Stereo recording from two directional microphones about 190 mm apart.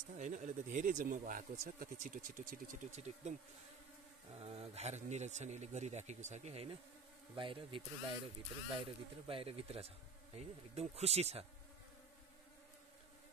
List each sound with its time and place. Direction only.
0.2 s speech: 40° right (ahead or behind)
4.4 s speech: 35° right (ahead or behind)